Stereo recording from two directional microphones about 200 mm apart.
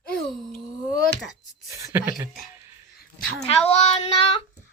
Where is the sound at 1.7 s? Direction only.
15° right (ahead or behind).